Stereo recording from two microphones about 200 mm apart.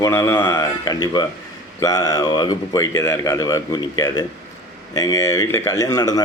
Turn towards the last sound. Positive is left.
turn(degrees=20)  # may be behind; listen again after turning